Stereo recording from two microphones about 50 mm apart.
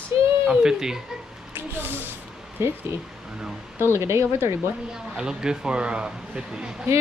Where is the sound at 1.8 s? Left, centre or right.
Right.